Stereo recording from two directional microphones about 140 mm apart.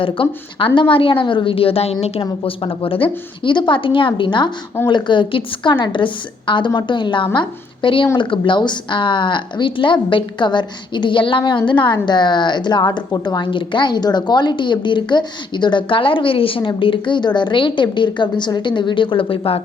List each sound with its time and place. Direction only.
0.0 s a woman's voice: 40° left (ahead or behind)
2.2 s a woman's voice: 35° left (ahead or behind)